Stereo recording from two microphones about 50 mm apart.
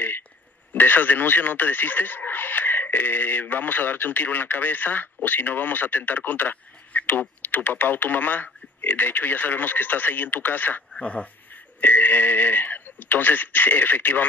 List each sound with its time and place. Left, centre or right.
0.7 s speech: left
11.0 s dog: left
11.8 s speech: left